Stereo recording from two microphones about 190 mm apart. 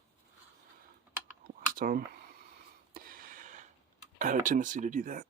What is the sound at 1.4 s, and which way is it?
Computer keyboard, 50° right (ahead or behind).